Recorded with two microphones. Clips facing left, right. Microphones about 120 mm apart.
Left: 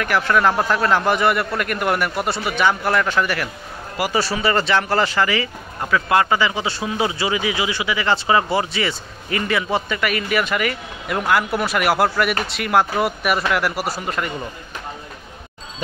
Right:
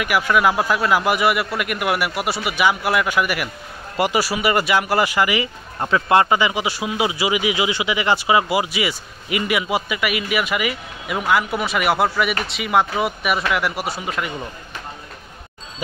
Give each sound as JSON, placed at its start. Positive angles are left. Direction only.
{"t": 0.0, "sound": "speech", "side_deg": -10}
{"t": 3.9, "sound": "speech", "side_deg": -25}
{"t": 4.2, "sound": "speech", "side_deg": -10}